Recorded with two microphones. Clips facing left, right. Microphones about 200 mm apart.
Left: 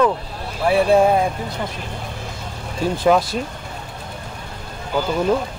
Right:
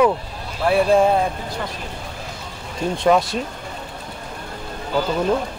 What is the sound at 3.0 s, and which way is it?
Speech, centre (ahead or behind).